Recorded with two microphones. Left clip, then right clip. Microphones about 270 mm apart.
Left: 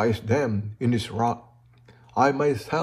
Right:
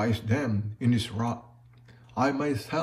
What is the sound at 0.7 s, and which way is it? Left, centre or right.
A man's voice, left.